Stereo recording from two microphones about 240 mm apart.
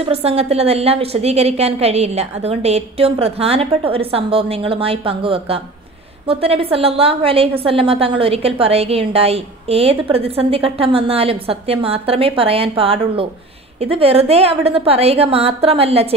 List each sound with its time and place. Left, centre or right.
0.0 s a woman's voice: right